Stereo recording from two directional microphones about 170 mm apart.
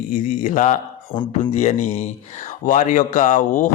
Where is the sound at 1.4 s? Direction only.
40° left (ahead or behind).